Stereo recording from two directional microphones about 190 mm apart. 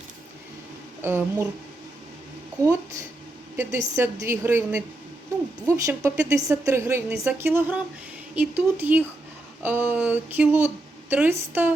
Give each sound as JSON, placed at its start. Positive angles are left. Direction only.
{"t": 1.0, "sound": "a woman's voice", "side_deg": -10}
{"t": 3.6, "sound": "a woman's voice", "side_deg": -15}